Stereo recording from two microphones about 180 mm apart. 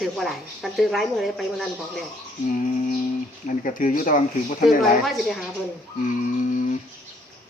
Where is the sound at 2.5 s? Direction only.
45° left (ahead or behind).